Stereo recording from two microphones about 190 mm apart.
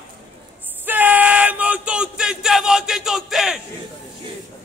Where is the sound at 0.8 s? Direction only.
10° right (ahead or behind).